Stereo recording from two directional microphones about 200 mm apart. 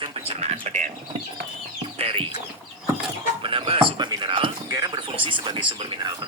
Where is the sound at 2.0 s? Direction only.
30° right (ahead or behind).